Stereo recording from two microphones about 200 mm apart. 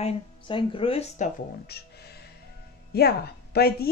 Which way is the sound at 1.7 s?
50° left (ahead or behind).